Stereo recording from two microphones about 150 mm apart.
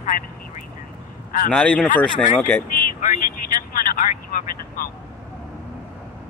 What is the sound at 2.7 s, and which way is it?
Speech, 60° left (ahead or behind).